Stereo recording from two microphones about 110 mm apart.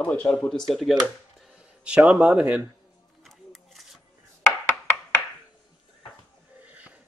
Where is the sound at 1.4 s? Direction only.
5° right (ahead or behind).